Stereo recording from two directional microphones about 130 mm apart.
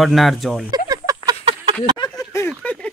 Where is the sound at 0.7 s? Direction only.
30° right (ahead or behind).